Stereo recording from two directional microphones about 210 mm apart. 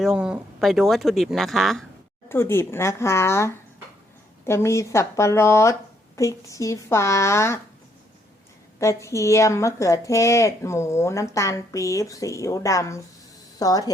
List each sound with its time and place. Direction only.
0.0 s speech: 5° right (ahead or behind)
2.3 s a woman's voice: 10° left (ahead or behind)
8.8 s a woman's voice: 15° left (ahead or behind)